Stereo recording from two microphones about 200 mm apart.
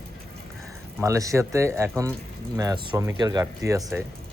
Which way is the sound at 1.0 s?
15° right (ahead or behind).